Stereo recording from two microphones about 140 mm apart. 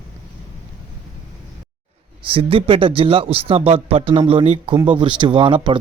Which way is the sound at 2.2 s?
40° right (ahead or behind).